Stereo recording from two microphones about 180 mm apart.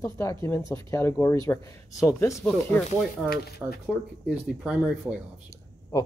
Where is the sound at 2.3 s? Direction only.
Centre (ahead or behind).